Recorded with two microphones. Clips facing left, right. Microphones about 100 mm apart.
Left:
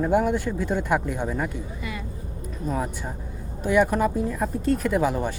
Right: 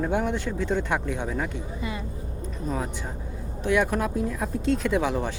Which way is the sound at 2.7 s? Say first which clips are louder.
Left 3 dB; 5° left (ahead or behind).